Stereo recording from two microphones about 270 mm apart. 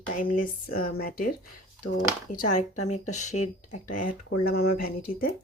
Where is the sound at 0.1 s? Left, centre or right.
Left.